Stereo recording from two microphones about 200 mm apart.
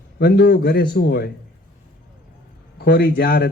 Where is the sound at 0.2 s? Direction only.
55° left (ahead or behind).